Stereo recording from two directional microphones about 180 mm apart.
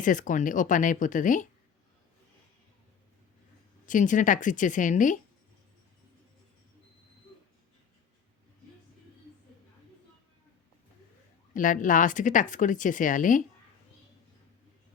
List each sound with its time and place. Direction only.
0.0 s speech: 45° left (ahead or behind)
3.8 s speech: 45° left (ahead or behind)
11.5 s speech: 45° left (ahead or behind)